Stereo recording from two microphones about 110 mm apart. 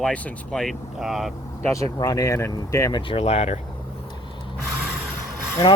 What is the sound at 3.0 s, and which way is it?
Speech, 65° left (ahead or behind).